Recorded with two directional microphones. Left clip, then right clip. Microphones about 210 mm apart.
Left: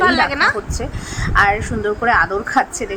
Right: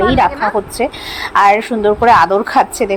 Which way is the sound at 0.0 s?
10° left (ahead or behind).